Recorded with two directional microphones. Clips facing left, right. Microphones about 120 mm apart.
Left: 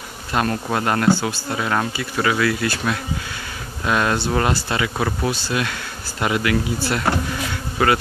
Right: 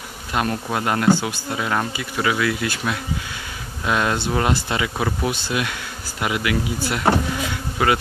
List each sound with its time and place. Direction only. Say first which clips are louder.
0.3 s bee: left 2 dB; 15° right (ahead or behind)
0.7 s speech: even; 15° right (ahead or behind)